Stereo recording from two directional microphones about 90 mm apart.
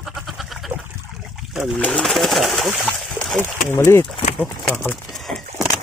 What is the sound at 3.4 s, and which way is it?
Speech, 25° left (ahead or behind).